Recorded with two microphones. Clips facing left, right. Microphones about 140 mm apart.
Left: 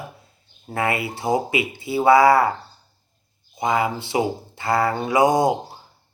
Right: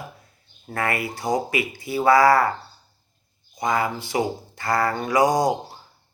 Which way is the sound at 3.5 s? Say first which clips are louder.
Left 2 dB; 20° left (ahead or behind).